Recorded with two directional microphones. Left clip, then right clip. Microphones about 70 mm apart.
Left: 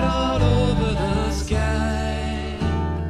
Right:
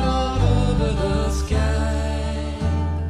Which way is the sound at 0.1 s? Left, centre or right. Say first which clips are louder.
Left 2 dB; right.